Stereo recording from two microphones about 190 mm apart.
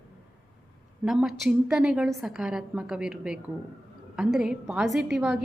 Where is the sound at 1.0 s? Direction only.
Centre (ahead or behind).